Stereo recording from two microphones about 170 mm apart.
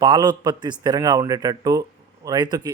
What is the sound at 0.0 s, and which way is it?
A man's voice, 25° right (ahead or behind).